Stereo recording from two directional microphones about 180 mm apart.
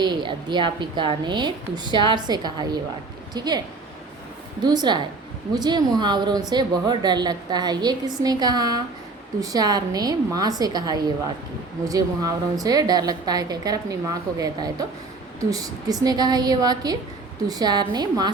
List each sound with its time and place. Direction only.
0.0 s a woman's voice: 25° right (ahead or behind)
4.6 s a woman's voice: 25° right (ahead or behind)